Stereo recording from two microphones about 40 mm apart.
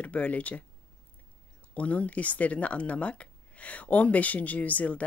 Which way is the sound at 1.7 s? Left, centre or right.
Left.